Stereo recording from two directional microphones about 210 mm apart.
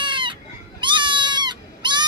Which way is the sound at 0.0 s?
20° right (ahead or behind).